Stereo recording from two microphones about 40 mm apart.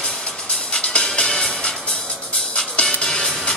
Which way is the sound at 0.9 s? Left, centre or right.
Left.